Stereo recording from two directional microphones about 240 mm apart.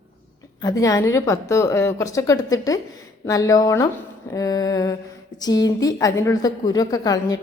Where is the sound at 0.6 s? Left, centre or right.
Centre.